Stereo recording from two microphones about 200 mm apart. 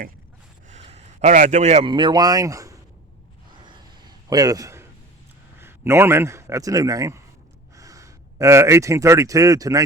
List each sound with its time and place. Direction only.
0.7 s speech: 35° right (ahead or behind); by 2.7 s 15° right (ahead or behind)
3.6 s a sound: 20° right (ahead or behind)
5.5 s a man's voice: 10° right (ahead or behind)